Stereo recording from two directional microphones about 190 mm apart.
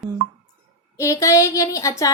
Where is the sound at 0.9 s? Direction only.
15° left (ahead or behind).